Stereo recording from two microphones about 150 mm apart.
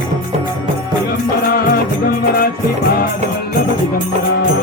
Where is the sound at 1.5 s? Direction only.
90° left.